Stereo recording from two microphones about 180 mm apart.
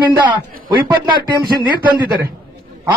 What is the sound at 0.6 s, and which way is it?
Speech, 25° right (ahead or behind).